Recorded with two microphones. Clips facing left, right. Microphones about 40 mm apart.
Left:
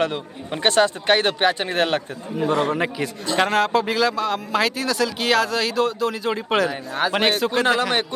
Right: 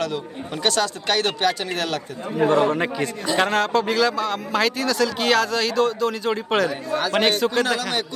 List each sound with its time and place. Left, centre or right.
0.0 s speech: left
2.4 s a man's voice: right
2.7 s a man's voice: centre
7.8 s a man's voice: left